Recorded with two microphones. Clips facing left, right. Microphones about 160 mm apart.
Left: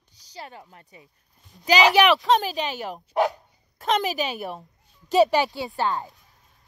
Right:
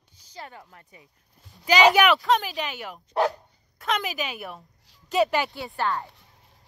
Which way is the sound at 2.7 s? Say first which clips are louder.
Left 5 dB; 40° left (ahead or behind).